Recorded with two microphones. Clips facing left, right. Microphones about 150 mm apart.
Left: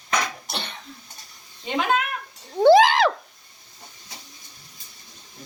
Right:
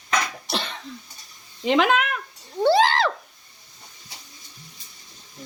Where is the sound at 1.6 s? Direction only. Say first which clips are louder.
Right 4 dB; 90° right.